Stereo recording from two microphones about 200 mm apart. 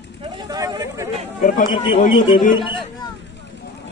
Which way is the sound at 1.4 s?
45° left (ahead or behind).